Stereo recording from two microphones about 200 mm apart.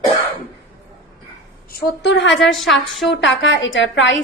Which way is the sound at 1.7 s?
50° left (ahead or behind).